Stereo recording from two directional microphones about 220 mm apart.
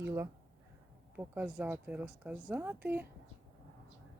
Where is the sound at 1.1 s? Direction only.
5° right (ahead or behind).